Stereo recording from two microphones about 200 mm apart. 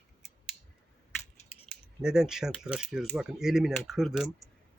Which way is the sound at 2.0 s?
5° right (ahead or behind).